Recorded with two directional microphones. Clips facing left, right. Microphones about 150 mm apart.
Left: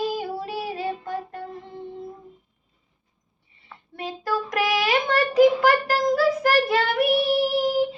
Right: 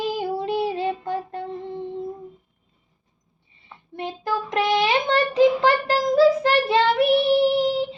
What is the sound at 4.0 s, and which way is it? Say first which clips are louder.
Child singing: right 1 dB; 25° right (ahead or behind).